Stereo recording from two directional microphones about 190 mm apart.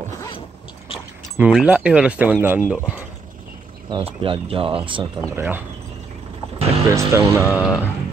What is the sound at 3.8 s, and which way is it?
Speech, 30° right (ahead or behind).